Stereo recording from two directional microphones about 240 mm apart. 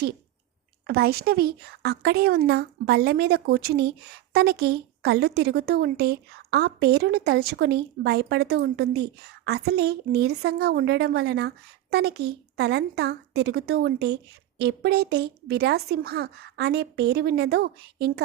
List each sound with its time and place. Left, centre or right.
0.9 s a woman's voice: right